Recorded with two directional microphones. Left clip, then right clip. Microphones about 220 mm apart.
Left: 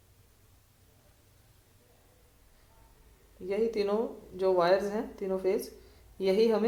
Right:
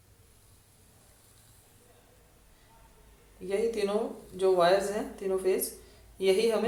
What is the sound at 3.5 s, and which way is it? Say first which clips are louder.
A woman's voice: even; 40° left (ahead or behind).